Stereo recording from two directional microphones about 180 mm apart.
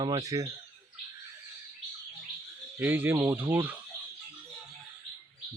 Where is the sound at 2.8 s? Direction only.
10° right (ahead or behind).